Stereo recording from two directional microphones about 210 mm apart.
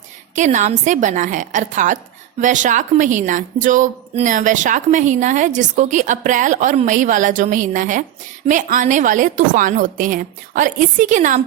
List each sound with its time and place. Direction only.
0.3 s a woman's voice: 35° right (ahead or behind)